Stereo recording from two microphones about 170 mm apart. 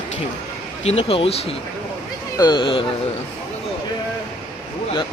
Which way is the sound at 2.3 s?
25° left (ahead or behind).